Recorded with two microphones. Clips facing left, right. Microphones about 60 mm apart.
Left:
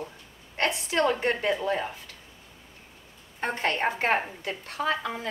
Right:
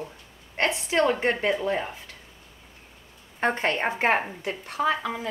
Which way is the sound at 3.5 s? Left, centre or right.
Right.